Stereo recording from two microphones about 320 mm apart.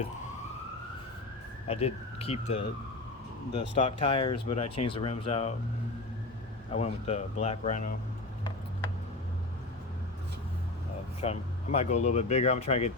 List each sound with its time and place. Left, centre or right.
1.6 s speech: centre
3.8 s speech: centre
6.7 s speech: centre
11.2 s speech: centre